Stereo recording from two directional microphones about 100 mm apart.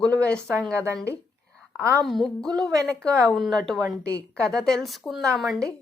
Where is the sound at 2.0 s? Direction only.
Centre (ahead or behind).